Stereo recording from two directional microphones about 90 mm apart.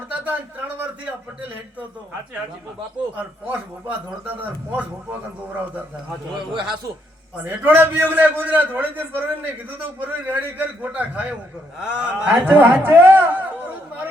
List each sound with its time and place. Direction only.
3.4 s a man's voice: 20° right (ahead or behind)
6.5 s a man's voice: 60° right (ahead or behind)
7.4 s a man's voice: 20° right (ahead or behind)